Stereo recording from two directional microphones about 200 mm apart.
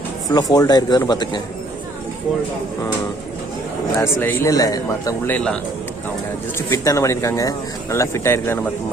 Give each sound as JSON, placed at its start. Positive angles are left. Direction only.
{"t": 0.3, "sound": "speech", "side_deg": 20}
{"t": 3.9, "sound": "speech", "side_deg": 10}
{"t": 6.6, "sound": "speech", "side_deg": 15}